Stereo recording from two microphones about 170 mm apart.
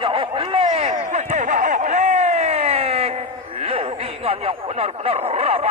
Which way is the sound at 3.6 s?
35° right (ahead or behind).